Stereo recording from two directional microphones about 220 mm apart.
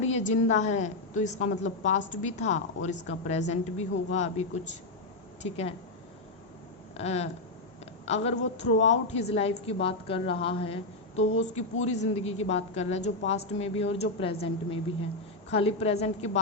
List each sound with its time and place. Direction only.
0.0 s a woman's voice: 30° left (ahead or behind)
6.9 s a woman's voice: 30° left (ahead or behind)